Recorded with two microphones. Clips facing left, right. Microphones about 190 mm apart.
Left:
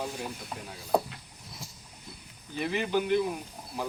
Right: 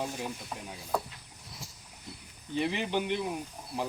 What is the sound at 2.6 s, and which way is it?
Speech, 20° right (ahead or behind).